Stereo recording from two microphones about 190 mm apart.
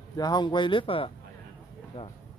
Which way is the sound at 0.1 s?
20° left (ahead or behind).